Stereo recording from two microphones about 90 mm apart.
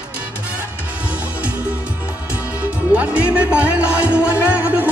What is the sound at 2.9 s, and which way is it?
Music, 15° right (ahead or behind).